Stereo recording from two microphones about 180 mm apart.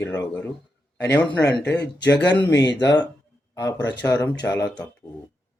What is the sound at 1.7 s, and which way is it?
Speech, 70° left (ahead or behind).